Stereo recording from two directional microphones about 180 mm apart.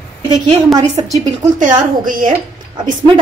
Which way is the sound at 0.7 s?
20° right (ahead or behind).